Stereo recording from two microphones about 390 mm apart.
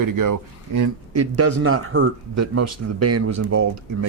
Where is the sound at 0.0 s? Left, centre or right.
Right.